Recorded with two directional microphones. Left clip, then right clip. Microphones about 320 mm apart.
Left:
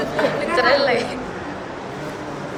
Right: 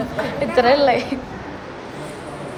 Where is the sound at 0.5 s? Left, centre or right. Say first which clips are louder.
Right 3 dB; centre.